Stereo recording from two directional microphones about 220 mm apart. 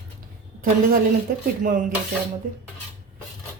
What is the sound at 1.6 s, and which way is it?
Speech, 40° right (ahead or behind).